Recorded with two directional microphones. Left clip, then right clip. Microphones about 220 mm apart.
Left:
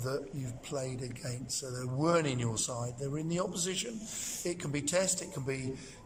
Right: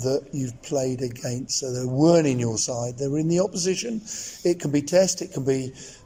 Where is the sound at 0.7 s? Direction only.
25° right (ahead or behind).